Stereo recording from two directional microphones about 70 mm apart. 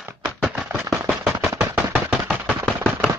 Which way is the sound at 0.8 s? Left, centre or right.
Centre.